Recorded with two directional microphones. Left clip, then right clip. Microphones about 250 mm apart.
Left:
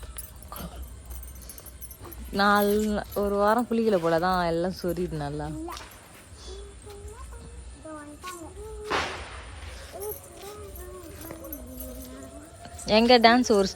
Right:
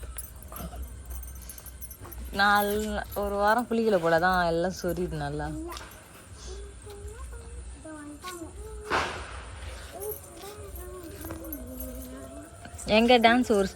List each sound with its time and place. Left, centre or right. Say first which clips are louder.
2.3 s speech: left 1 dB; left
2.6 s music: left 4 dB; centre
2.9 s speech: left 3 dB; centre
9.6 s a sound: left 1 dB; centre
12.8 s speech: left 2 dB; centre